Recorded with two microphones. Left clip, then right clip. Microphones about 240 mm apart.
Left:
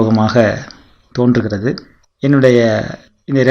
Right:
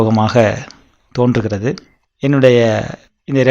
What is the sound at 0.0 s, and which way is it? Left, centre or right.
Speech, right.